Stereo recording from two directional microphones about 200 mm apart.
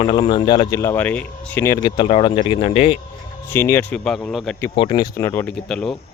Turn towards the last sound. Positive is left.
turn(degrees=0)  # may be behind; listen again after turning